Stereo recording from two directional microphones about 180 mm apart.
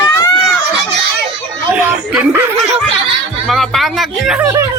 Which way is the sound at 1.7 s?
5° right (ahead or behind).